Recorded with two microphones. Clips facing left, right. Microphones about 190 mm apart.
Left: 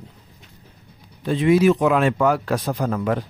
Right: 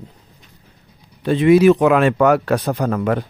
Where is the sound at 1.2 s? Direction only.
70° right (ahead or behind).